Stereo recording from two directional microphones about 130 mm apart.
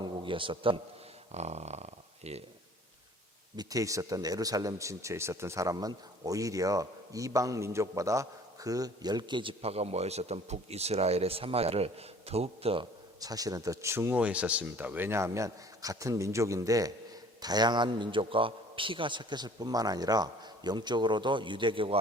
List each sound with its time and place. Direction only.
0.0 s a man's voice: 40° right (ahead or behind)
1.3 s speech: 60° right (ahead or behind)
3.5 s speech: 30° right (ahead or behind); by 12.8 s 50° right (ahead or behind)
13.1 s a man's voice: 30° right (ahead or behind)